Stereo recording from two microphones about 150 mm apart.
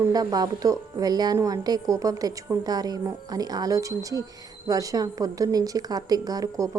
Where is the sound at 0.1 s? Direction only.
25° right (ahead or behind).